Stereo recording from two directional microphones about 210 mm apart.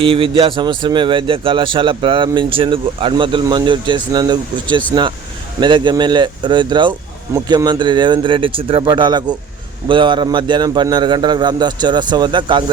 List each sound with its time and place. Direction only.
0.0 s speech: 25° right (ahead or behind)